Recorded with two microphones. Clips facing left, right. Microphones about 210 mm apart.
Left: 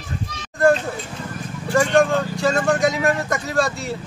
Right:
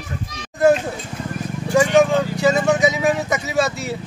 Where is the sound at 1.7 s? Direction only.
10° right (ahead or behind).